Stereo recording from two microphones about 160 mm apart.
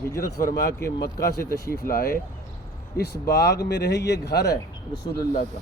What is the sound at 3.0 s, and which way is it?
Speech, 90° left.